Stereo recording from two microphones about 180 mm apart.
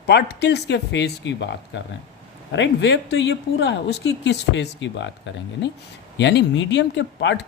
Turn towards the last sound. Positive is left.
turn(degrees=75)  # may be behind; listen again after turning